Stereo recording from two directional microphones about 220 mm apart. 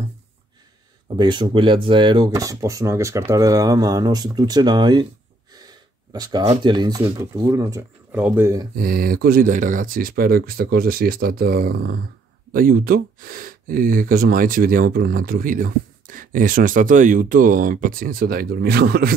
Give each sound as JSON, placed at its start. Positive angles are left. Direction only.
{"t": 1.1, "sound": "speech", "side_deg": -20}
{"t": 5.5, "sound": "gasp", "side_deg": -20}
{"t": 6.4, "sound": "speech", "side_deg": -25}
{"t": 8.7, "sound": "speech", "side_deg": -40}